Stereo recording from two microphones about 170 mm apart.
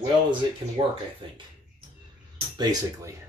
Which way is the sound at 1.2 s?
30° right (ahead or behind).